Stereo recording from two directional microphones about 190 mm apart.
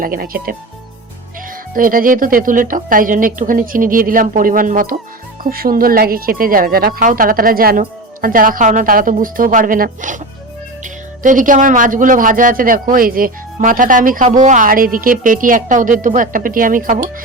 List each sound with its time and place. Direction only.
0.0 s speech: 50° right (ahead or behind)
1.7 s speech: 45° right (ahead or behind)